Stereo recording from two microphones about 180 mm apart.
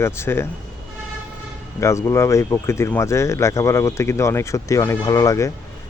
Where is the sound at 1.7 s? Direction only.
15° left (ahead or behind).